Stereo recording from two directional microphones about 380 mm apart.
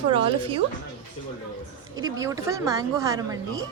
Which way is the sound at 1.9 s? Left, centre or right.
Centre.